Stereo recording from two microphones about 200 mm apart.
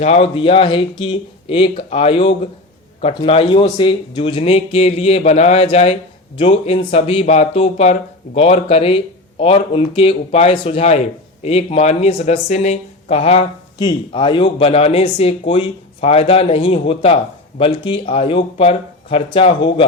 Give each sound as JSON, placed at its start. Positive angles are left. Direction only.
{"t": 0.0, "sound": "speech", "side_deg": 30}